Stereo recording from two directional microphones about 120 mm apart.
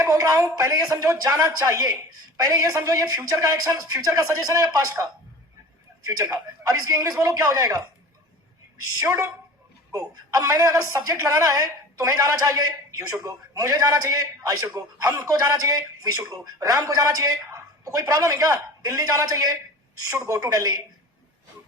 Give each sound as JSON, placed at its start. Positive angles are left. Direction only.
{"t": 0.0, "sound": "a woman's voice", "side_deg": -25}
{"t": 6.1, "sound": "a man's voice", "side_deg": -30}
{"t": 9.0, "sound": "a woman's voice", "side_deg": -30}